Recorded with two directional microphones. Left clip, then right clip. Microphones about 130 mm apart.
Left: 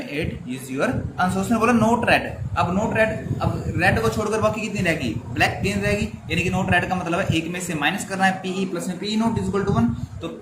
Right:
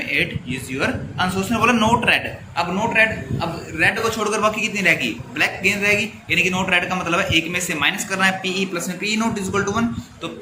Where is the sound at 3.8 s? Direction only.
55° left (ahead or behind); by 9.8 s 35° left (ahead or behind).